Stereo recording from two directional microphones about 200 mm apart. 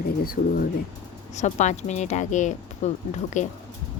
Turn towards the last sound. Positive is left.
turn(degrees=35)  # may be behind; listen again after turning